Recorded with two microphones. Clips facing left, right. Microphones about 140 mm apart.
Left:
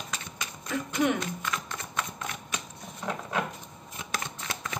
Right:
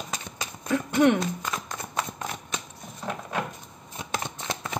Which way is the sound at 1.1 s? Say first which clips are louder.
Right 3 dB; 35° right (ahead or behind).